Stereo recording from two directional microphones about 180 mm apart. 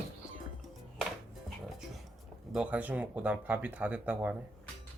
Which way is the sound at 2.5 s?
5° right (ahead or behind).